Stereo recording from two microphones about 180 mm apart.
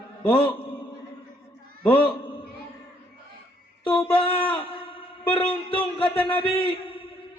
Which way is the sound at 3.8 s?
30° left (ahead or behind).